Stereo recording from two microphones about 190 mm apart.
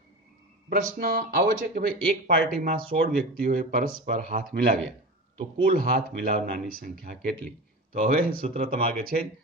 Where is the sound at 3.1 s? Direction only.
45° right (ahead or behind).